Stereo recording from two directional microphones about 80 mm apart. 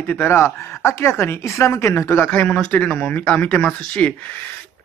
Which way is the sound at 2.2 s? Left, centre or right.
Centre.